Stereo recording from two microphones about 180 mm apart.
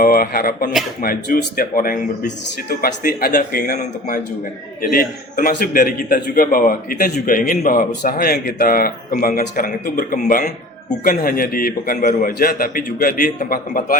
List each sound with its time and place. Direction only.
0.0 s a man's voice: 55° left (ahead or behind)